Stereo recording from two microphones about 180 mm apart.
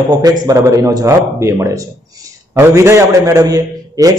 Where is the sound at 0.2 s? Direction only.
20° right (ahead or behind).